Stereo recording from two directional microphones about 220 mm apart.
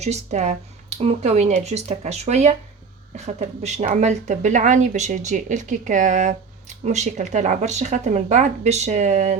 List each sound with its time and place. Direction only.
0.0 s speech: 30° right (ahead or behind)